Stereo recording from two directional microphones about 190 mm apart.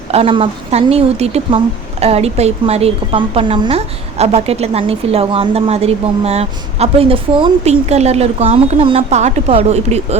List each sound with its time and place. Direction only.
0.1 s speech: 30° right (ahead or behind)